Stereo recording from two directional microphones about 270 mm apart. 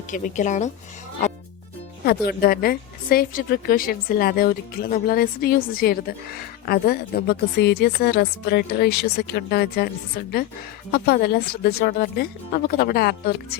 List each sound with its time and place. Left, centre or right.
0.1 s speech: left
2.0 s a woman's voice: left
10.9 s a woman's voice: left